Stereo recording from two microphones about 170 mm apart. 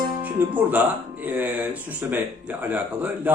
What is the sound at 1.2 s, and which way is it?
Speech, 10° right (ahead or behind).